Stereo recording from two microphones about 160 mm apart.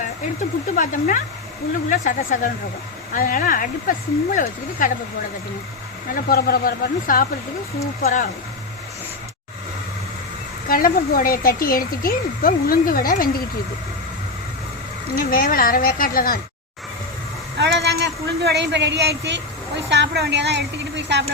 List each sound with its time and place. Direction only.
0.8 s speech: 55° left (ahead or behind)
6.2 s speech: 70° left (ahead or behind)
8.0 s speech: 50° left (ahead or behind)
10.7 s speech: 65° left (ahead or behind)
15.1 s speech: 60° left (ahead or behind)
17.6 s speech: 90° right